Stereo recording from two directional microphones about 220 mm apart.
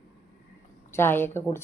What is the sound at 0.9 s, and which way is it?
Speech, 10° left (ahead or behind).